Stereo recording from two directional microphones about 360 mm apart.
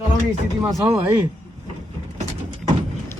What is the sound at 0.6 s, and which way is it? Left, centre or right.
Speech, centre.